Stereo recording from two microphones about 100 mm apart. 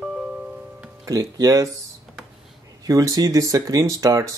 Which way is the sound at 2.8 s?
35° right (ahead or behind).